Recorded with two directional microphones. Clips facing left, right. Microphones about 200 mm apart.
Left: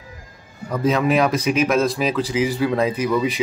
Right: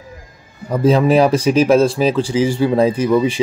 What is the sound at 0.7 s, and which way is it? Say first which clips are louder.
Speech: right 6 dB; 30° right (ahead or behind).